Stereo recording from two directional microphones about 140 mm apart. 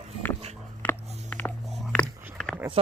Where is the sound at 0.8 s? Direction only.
15° left (ahead or behind).